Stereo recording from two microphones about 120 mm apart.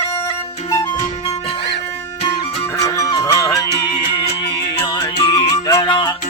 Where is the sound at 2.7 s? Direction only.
25° left (ahead or behind).